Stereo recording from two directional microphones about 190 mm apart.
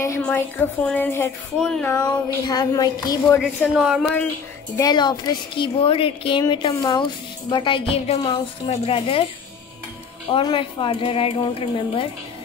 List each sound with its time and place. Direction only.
0.0 s a woman's voice: 10° left (ahead or behind)
1.9 s a woman's voice: 20° left (ahead or behind)
3.3 s speech: centre (ahead or behind)
4.7 s a woman's voice: 20° left (ahead or behind)
10.3 s a woman's voice: 25° left (ahead or behind)